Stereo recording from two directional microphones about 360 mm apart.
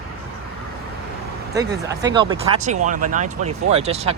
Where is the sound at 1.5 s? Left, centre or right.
Centre.